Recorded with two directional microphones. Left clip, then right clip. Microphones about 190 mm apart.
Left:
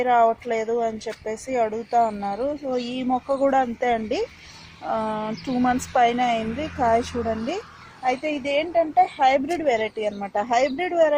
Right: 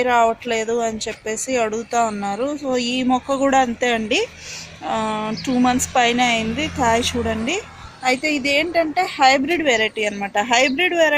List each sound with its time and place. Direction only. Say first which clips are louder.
0.0 s a woman's voice: right 2 dB; 20° left (ahead or behind)
8.0 s a woman's voice: right 5 dB; 5° left (ahead or behind)